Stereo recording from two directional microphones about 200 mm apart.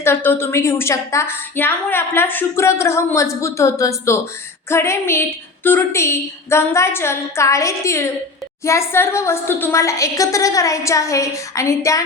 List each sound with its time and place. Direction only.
0.0 s a woman's voice: 10° left (ahead or behind)